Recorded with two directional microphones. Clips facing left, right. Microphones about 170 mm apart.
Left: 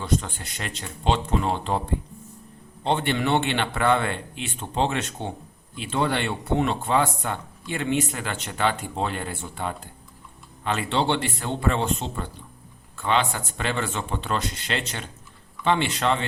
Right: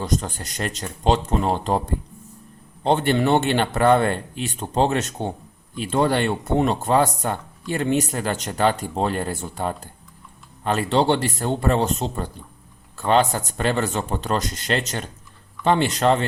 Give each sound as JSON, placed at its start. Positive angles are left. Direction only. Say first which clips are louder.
{"t": 0.0, "sound": "speech", "louder": "right 1 dB", "side_deg": -40}